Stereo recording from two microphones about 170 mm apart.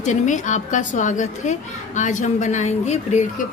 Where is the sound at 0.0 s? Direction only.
45° left (ahead or behind).